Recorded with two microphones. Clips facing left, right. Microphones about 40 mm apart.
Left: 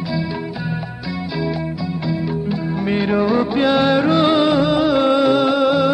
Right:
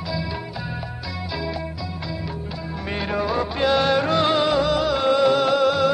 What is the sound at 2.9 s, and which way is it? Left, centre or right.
Music, centre.